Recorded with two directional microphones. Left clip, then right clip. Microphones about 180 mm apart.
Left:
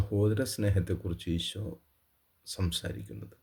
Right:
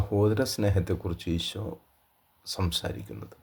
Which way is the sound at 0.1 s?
20° left (ahead or behind).